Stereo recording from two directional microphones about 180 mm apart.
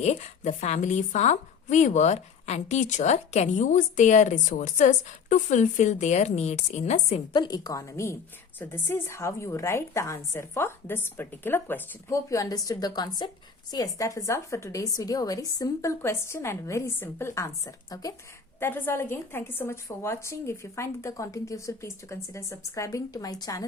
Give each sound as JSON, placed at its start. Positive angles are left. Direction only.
{"t": 0.0, "sound": "a woman's voice", "side_deg": 40}
{"t": 7.3, "sound": "a woman's voice", "side_deg": 20}